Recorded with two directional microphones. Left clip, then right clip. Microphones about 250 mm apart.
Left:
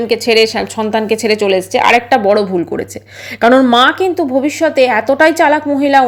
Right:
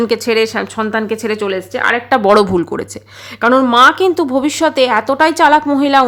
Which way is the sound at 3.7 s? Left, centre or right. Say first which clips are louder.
Right 1 dB; centre.